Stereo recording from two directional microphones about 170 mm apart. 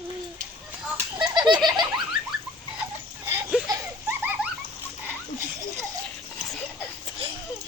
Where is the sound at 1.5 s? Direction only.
Centre (ahead or behind).